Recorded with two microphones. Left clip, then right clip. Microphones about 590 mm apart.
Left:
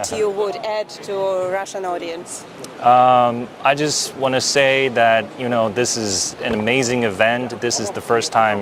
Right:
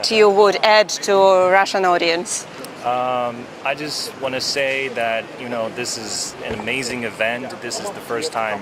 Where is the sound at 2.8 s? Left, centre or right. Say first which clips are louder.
Left 8 dB; left.